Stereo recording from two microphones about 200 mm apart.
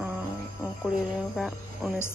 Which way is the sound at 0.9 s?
Centre (ahead or behind).